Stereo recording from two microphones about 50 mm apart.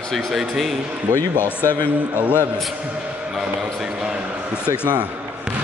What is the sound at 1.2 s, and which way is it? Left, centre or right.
Speech, left.